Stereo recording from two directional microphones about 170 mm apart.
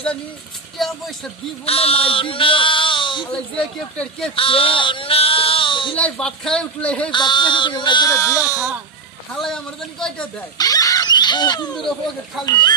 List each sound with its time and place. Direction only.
0.8 s speech: centre (ahead or behind)
1.6 s a man's voice: 35° left (ahead or behind)
3.2 s speech: 5° left (ahead or behind)
4.4 s speech: 30° left (ahead or behind)
6.0 s speech: 5° left (ahead or behind)
7.1 s speech: 25° left (ahead or behind)
9.3 s speech: 5° left (ahead or behind)
10.6 s squeal: 20° left (ahead or behind)
11.7 s speech: 5° left (ahead or behind)
12.5 s speech: 25° left (ahead or behind)